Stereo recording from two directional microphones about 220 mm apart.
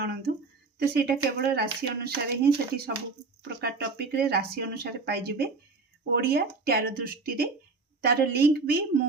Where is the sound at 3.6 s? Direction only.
45° right (ahead or behind).